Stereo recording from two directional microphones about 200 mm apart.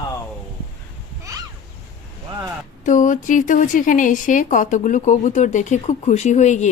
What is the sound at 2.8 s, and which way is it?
A woman's voice, 40° left (ahead or behind).